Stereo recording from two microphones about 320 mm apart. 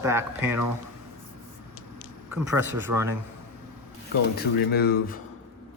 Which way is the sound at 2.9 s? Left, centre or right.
Centre.